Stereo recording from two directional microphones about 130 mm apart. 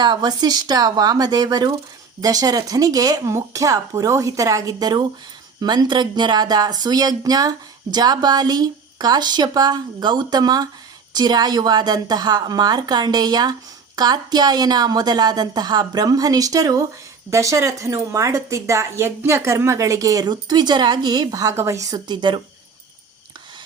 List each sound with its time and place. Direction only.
0.0 s speech: 35° right (ahead or behind)